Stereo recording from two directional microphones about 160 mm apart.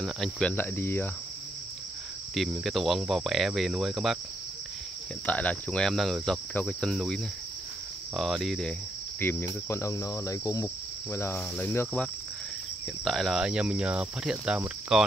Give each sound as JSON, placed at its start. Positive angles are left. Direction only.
{"t": 0.0, "sound": "cricket", "side_deg": 5}
{"t": 2.3, "sound": "speech", "side_deg": 0}
{"t": 5.2, "sound": "speech", "side_deg": 10}
{"t": 8.2, "sound": "speech", "side_deg": 0}
{"t": 9.2, "sound": "cricket", "side_deg": 15}
{"t": 13.0, "sound": "speech", "side_deg": 0}